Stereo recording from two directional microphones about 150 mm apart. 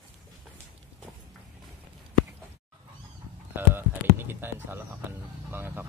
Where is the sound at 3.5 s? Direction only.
15° right (ahead or behind).